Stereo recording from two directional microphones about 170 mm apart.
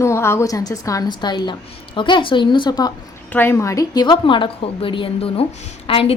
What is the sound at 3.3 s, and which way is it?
A woman's voice, 15° left (ahead or behind).